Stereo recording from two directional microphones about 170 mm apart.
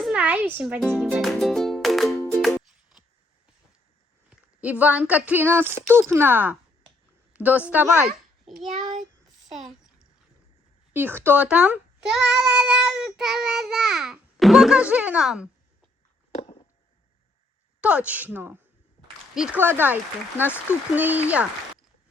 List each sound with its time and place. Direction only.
0.0 s music: 5° right (ahead or behind)
4.3 s speech: 10° right (ahead or behind)
10.9 s speech: 10° right (ahead or behind)
12.1 s child singing: 5° right (ahead or behind)
16.3 s a sound: 35° left (ahead or behind)
17.7 s speech: 5° right (ahead or behind)